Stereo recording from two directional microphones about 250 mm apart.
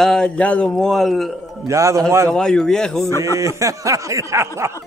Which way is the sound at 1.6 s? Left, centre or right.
Centre.